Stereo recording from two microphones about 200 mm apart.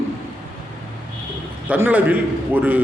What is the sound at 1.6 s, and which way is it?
A man's voice, 10° right (ahead or behind).